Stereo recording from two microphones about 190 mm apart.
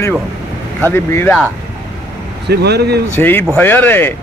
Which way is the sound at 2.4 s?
60° right (ahead or behind).